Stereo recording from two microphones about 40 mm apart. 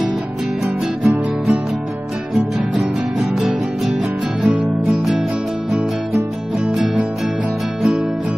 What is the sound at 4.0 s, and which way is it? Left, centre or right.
Music, right.